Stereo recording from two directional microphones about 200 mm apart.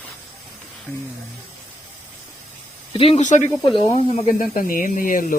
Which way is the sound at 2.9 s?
30° left (ahead or behind).